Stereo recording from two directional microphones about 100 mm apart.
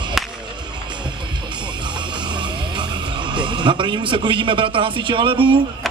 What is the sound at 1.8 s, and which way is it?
Music, 50° right (ahead or behind).